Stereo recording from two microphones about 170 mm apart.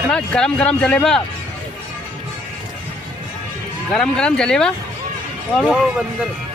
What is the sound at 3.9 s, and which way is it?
Speech, 5° left (ahead or behind).